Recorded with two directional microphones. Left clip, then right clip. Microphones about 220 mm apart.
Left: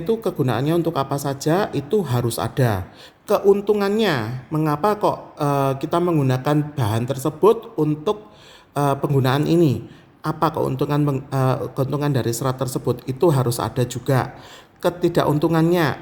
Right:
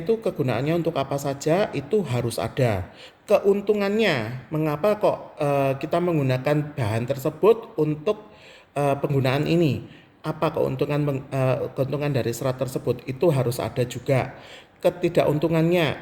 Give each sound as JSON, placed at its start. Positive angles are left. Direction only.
{"t": 0.3, "sound": "a woman's voice", "side_deg": 35}